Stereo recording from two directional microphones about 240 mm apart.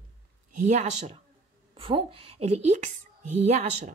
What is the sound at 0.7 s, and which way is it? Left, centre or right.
A woman's voice, right.